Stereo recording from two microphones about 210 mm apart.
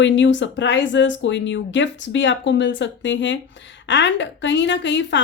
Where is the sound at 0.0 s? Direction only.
60° left (ahead or behind).